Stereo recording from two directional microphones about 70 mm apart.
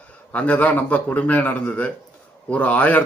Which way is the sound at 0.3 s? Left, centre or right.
Centre.